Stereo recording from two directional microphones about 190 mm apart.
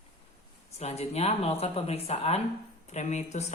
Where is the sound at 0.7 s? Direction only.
35° left (ahead or behind).